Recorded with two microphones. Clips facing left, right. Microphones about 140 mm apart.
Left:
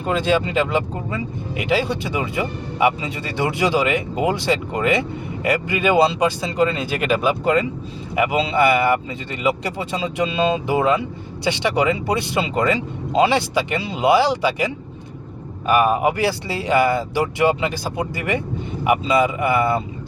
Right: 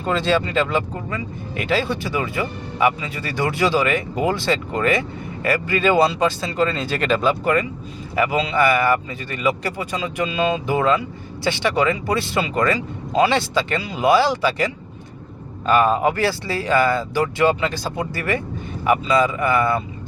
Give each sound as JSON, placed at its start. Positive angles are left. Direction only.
{"t": 0.0, "sound": "speech", "side_deg": 10}